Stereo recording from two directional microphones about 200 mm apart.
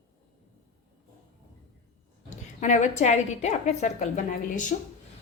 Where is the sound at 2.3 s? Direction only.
35° left (ahead or behind).